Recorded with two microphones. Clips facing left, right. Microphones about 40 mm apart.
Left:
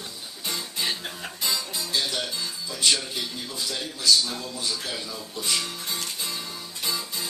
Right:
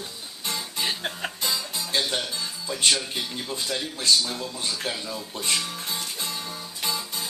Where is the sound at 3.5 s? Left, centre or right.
Right.